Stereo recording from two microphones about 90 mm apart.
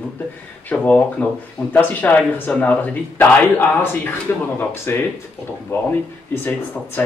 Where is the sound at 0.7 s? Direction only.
15° left (ahead or behind).